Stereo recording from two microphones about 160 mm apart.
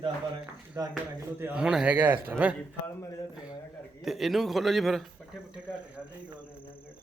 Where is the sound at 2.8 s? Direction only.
15° left (ahead or behind).